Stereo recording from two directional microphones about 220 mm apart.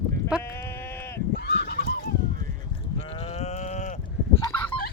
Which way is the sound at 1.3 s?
50° left (ahead or behind).